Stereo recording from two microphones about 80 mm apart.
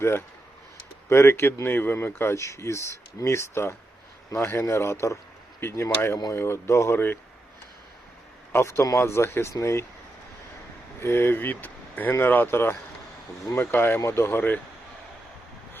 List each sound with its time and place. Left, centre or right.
1.1 s speech: left
8.5 s speech: left
11.0 s speech: left